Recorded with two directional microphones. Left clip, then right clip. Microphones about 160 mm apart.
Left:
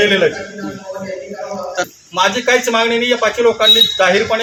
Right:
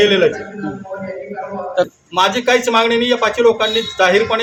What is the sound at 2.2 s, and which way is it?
Speech, 20° right (ahead or behind).